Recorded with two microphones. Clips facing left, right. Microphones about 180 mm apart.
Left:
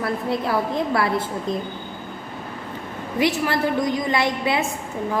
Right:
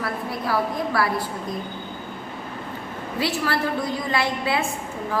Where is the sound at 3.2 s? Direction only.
20° left (ahead or behind).